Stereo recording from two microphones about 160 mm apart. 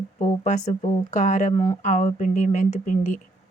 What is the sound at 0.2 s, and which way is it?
Speech, 50° left (ahead or behind).